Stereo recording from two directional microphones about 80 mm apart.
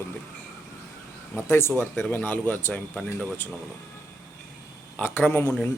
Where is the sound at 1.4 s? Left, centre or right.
Left.